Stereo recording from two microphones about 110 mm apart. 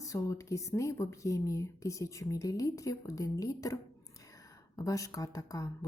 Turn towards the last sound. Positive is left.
turn(degrees=30)  # may be behind; listen again after turning